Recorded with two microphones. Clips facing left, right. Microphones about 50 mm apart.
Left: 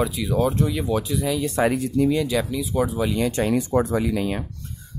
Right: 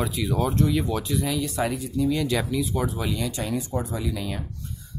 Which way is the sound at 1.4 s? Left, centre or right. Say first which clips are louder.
Left 5 dB; left.